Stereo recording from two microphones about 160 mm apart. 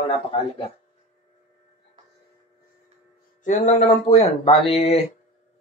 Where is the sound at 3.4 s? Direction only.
45° left (ahead or behind).